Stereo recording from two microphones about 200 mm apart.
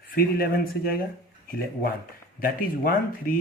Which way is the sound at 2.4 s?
45° left (ahead or behind).